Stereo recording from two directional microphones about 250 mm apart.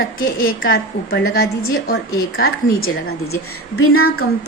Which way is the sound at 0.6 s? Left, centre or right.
Left.